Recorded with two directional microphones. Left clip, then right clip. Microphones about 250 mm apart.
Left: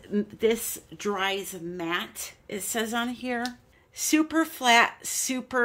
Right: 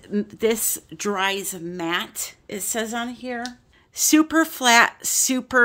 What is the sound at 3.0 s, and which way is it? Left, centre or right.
Speech, centre.